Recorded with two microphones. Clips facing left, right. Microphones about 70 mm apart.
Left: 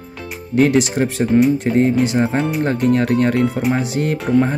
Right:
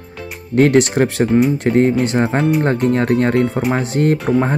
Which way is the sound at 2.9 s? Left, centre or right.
Right.